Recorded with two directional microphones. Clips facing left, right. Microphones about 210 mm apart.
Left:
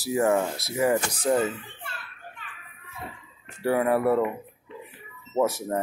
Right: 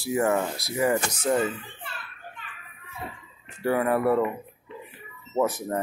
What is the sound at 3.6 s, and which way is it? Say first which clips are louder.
Speech: left 1 dB; 5° left (ahead or behind).